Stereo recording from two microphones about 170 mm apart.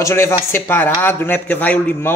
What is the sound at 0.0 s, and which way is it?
A man's voice, 15° left (ahead or behind).